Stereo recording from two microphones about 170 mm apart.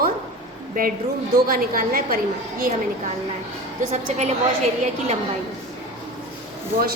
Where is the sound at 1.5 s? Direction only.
55° right (ahead or behind).